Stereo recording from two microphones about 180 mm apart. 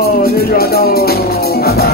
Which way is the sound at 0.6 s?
60° left (ahead or behind).